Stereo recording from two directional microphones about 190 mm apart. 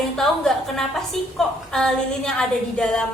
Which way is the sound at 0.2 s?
Centre (ahead or behind).